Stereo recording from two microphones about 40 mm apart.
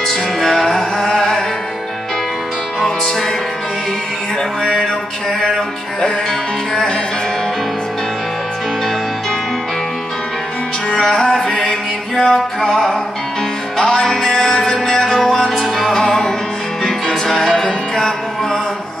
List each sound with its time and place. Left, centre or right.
0.0 s music: centre
4.4 s music: centre
10.9 s music: centre